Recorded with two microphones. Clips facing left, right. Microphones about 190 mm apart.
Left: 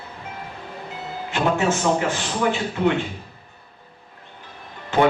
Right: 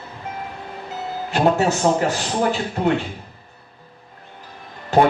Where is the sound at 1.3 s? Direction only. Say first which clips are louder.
Right 3 dB; 40° right (ahead or behind).